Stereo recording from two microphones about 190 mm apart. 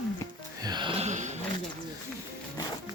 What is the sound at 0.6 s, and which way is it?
Music, 20° right (ahead or behind).